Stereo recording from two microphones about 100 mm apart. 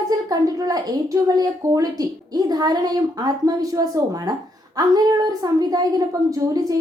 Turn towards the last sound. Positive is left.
turn(degrees=-35)  # may be behind; listen again after turning